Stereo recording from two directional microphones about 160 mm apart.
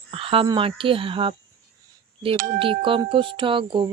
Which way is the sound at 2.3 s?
60° right (ahead or behind).